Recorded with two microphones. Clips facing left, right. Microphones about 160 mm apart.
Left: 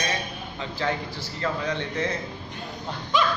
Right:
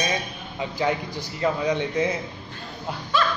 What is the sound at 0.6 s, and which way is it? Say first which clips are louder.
Speech: right 4 dB; 15° right (ahead or behind).